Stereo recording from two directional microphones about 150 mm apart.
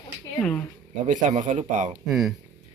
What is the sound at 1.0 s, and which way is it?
Speech, 55° right (ahead or behind).